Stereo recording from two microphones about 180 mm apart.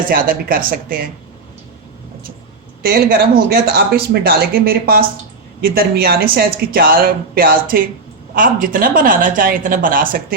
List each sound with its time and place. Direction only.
0.1 s speech: 50° right (ahead or behind)
2.8 s speech: 60° right (ahead or behind)